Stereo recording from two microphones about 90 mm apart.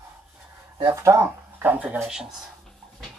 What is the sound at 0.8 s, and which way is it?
Speech, 35° right (ahead or behind).